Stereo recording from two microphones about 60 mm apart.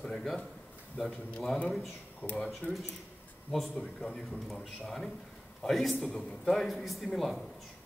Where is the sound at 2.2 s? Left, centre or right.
Left.